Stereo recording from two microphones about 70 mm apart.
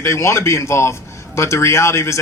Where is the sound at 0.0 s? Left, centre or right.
Left.